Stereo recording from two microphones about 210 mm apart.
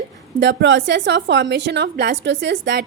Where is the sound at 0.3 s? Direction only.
60° right (ahead or behind).